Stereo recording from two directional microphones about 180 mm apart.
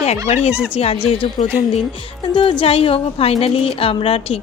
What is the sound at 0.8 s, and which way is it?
A woman's voice, 35° left (ahead or behind).